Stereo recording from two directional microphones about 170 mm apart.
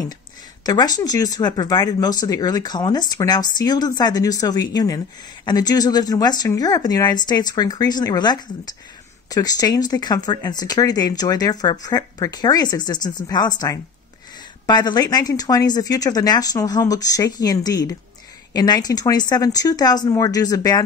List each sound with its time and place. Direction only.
0.7 s a woman's voice: 20° left (ahead or behind)